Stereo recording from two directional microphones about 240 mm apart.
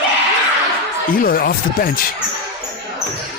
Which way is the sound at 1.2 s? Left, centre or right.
Left.